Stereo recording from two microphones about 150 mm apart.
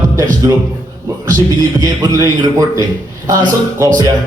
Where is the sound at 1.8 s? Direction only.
20° right (ahead or behind).